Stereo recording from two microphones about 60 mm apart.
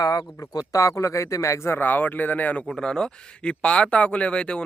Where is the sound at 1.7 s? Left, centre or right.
Left.